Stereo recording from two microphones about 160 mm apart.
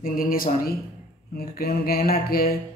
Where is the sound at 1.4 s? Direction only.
75° left (ahead or behind).